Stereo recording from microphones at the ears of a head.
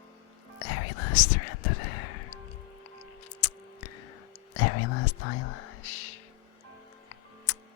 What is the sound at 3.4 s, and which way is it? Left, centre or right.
Whispering, left.